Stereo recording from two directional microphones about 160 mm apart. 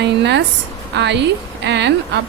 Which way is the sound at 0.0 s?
90° right.